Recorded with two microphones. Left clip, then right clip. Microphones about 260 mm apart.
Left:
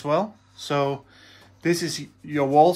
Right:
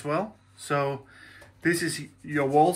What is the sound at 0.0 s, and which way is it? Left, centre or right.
Speech, left.